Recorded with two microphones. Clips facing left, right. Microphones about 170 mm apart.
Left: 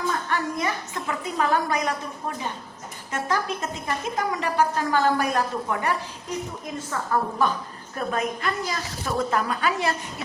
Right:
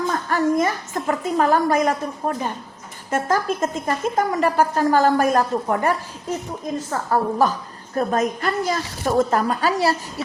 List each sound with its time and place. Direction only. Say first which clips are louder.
0.1 s a woman's voice: right 7 dB; 45° right (ahead or behind)
7.1 s a woman's voice: right 5 dB; 40° right (ahead or behind)